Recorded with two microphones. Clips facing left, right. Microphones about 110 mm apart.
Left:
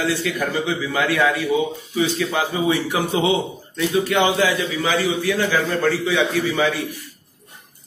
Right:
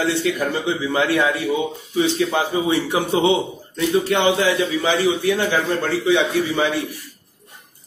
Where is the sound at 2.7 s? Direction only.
25° right (ahead or behind).